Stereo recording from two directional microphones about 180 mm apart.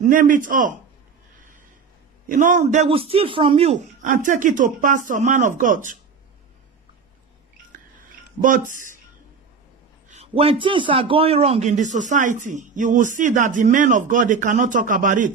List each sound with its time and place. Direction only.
0.0 s a man's voice: 45° right (ahead or behind)
2.2 s a man's voice: 45° right (ahead or behind)
8.0 s a sound: 45° right (ahead or behind)
10.0 s a man's voice: 35° right (ahead or behind)